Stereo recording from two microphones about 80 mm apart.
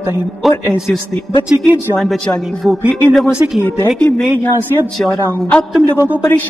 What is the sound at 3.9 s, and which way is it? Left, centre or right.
Speech, centre.